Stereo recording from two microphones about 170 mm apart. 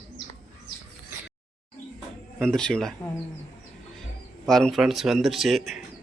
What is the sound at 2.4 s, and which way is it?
Speech, 5° left (ahead or behind).